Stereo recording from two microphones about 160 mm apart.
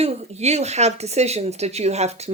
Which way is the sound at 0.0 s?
45° right (ahead or behind).